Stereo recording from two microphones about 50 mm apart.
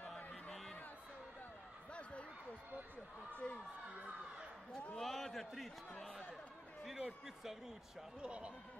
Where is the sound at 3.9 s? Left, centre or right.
Right.